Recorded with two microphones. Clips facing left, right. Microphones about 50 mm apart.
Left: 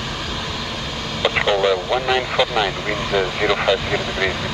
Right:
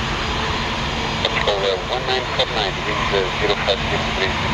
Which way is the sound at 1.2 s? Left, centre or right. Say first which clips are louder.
Left 3 dB; left.